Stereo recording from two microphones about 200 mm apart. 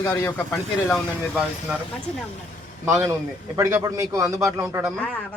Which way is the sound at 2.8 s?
15° right (ahead or behind).